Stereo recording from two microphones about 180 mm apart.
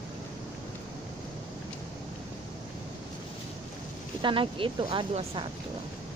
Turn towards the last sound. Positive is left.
turn(degrees=-30)  # may be behind; listen again after turning